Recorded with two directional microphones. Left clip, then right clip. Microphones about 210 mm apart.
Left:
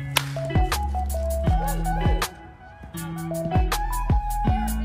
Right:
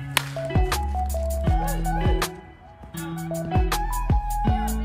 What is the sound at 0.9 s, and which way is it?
Music, 25° right (ahead or behind).